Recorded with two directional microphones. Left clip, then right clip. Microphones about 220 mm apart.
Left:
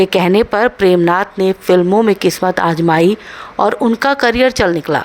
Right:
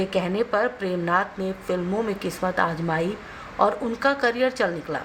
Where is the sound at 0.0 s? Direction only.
50° left (ahead or behind).